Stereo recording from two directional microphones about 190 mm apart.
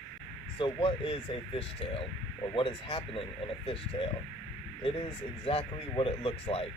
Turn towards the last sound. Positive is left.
turn(degrees=30)  # may be behind; listen again after turning